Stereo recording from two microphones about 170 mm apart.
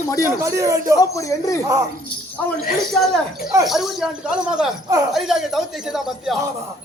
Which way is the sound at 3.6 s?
Centre (ahead or behind).